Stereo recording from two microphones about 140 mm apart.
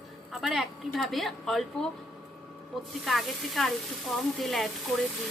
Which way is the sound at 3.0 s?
Centre (ahead or behind).